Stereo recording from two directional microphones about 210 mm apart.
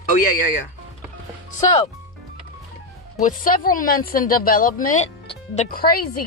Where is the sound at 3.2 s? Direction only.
40° left (ahead or behind).